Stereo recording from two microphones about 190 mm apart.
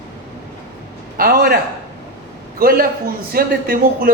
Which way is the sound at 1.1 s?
50° right (ahead or behind).